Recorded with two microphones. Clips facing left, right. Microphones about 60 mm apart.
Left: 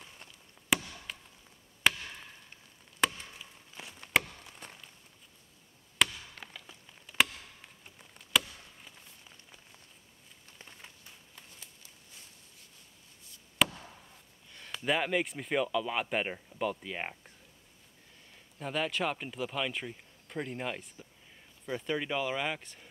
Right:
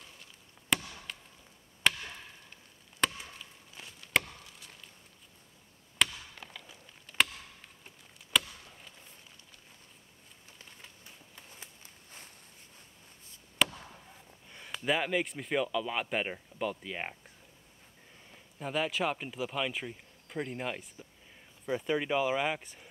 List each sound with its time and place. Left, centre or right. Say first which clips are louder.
0.7 s chop: left 1 dB; centre
1.1 s a sound: left 1 dB; centre
1.8 s chop: left 1 dB; centre
3.0 s chop: left 1 dB; centre
3.3 s a sound: left 1 dB; centre
4.1 s chop: left 1 dB; centre
6.0 s chop: left 1 dB; centre
6.5 s a sound: right 1 dB; centre
8.3 s chop: even; centre
11.5 s walk: right 3 dB; right
13.6 s chop: left 1 dB; centre
14.8 s speech: even; centre
18.3 s speech: right 1 dB; centre